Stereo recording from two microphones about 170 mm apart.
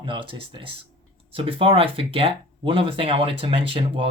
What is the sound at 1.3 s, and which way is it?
Speech, 35° right (ahead or behind).